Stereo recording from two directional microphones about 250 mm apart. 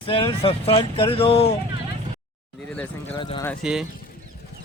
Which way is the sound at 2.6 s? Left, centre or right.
Centre.